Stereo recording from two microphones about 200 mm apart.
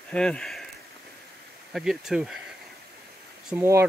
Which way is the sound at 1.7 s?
Centre (ahead or behind).